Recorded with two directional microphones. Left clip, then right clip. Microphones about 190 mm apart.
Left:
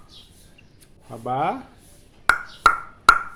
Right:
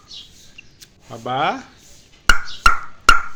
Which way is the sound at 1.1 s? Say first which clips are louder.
Right 3 dB; 5° right (ahead or behind).